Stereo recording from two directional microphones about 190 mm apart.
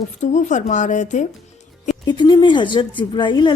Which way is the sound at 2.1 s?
25° left (ahead or behind).